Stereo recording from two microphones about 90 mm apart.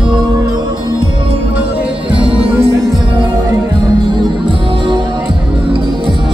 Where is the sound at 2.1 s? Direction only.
90° right.